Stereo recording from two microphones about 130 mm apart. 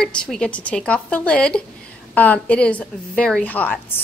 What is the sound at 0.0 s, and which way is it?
A woman's voice, 5° left (ahead or behind).